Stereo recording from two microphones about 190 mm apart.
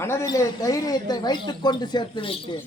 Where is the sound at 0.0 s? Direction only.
15° left (ahead or behind).